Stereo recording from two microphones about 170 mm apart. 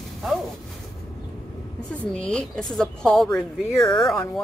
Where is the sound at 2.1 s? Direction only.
5° left (ahead or behind).